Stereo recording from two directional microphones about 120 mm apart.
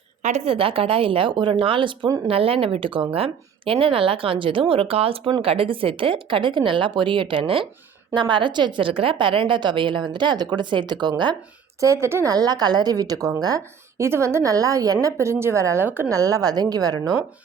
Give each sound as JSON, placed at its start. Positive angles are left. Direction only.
{"t": 0.2, "sound": "a woman's voice", "side_deg": -85}
{"t": 0.4, "sound": "a woman's voice", "side_deg": -50}
{"t": 11.8, "sound": "a woman's voice", "side_deg": -25}
{"t": 12.3, "sound": "a woman's voice", "side_deg": -35}
{"t": 16.1, "sound": "a woman's voice", "side_deg": -30}